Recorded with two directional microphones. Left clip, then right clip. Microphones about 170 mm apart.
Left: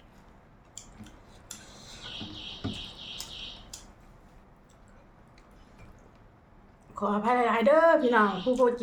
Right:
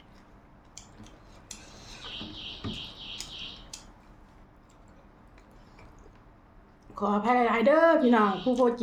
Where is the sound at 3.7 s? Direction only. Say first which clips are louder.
Right 1 dB; 10° right (ahead or behind).